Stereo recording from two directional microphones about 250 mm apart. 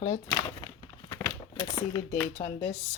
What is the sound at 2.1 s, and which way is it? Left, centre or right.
Speech, left.